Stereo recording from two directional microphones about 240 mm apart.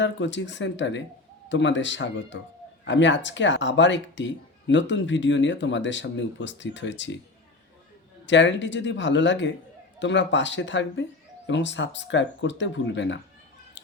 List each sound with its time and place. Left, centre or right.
0.0 s speech: left
8.3 s speech: left